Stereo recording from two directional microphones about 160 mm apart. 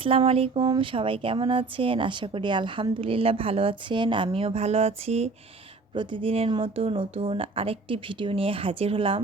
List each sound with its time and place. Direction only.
0.0 s speech: 35° right (ahead or behind)